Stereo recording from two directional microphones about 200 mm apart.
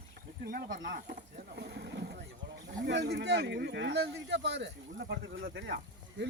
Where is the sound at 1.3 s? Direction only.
55° right (ahead or behind).